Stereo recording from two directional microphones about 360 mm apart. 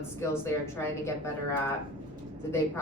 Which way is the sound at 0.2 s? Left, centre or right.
Centre.